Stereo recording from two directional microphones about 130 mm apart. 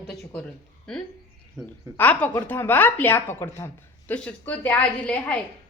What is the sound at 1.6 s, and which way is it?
Speech, centre (ahead or behind).